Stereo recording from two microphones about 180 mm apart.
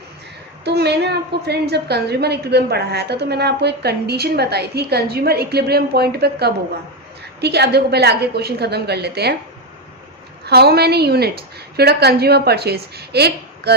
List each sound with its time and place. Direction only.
0.6 s a woman's voice: 65° right (ahead or behind)
10.4 s a woman's voice: 60° right (ahead or behind)